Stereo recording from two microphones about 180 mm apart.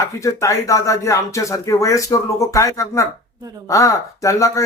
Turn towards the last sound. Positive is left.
turn(degrees=15)  # may be behind; listen again after turning